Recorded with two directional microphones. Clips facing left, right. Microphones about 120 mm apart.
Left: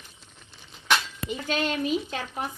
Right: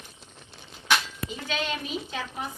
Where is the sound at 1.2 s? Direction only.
45° left (ahead or behind).